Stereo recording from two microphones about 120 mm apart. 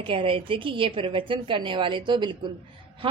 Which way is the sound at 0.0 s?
50° right (ahead or behind).